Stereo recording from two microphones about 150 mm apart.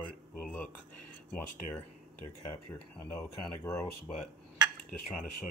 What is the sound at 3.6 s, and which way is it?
Speech, 20° left (ahead or behind).